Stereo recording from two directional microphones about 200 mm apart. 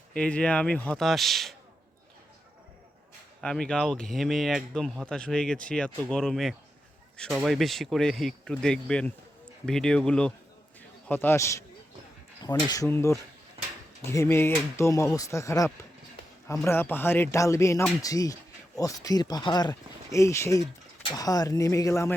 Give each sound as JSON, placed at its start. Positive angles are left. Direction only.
{"t": 0.1, "sound": "speech", "side_deg": 5}
{"t": 3.4, "sound": "speech", "side_deg": 5}
{"t": 12.7, "sound": "speech", "side_deg": 15}